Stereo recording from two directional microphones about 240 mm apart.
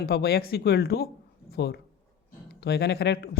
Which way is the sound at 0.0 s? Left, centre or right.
Left.